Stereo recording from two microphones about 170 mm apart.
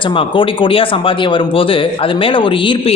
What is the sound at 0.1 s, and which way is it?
Speech, 30° left (ahead or behind).